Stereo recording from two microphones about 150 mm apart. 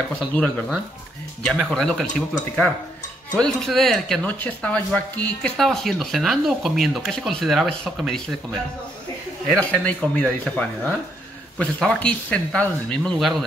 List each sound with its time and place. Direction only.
0.3 s speech: 10° left (ahead or behind)
3.3 s speech: 5° left (ahead or behind)
9.5 s speech: 10° left (ahead or behind)